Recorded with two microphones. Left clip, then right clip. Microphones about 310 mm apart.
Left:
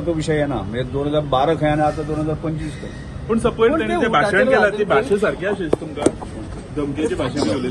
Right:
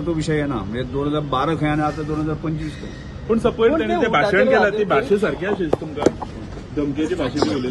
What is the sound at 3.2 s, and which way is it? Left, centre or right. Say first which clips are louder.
Speech: even; left.